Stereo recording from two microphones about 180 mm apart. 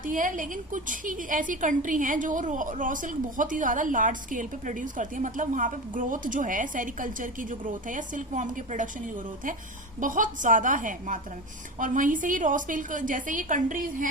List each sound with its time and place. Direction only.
0.0 s a woman's voice: 50° right (ahead or behind)